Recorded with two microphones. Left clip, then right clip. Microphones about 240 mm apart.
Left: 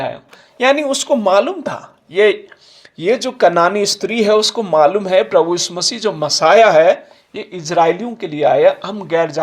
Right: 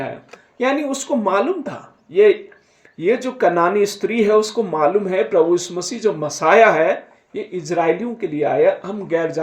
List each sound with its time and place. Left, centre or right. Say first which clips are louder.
0.6 s speech: left 6 dB; left